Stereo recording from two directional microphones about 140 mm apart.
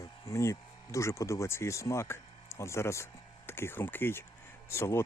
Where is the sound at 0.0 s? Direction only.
20° left (ahead or behind).